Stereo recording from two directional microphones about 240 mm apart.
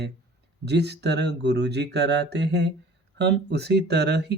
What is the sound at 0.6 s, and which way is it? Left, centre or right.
Speech, right.